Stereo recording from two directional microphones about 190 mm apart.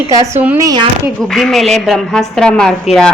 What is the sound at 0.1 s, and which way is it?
Speech, 10° right (ahead or behind).